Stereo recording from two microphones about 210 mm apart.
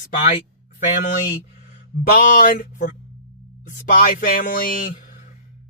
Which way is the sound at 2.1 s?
40° left (ahead or behind).